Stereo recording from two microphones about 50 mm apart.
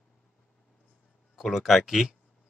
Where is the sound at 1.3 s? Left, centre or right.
Centre.